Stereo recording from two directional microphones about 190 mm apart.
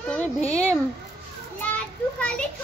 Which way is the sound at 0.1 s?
10° left (ahead or behind).